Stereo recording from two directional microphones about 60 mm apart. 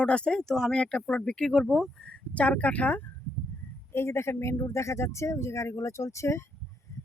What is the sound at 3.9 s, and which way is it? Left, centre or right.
Speech, left.